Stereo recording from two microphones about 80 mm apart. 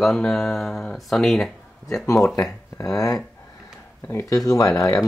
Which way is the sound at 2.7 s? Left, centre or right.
Left.